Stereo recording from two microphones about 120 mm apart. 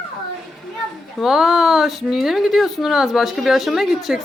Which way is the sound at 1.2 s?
5° right (ahead or behind).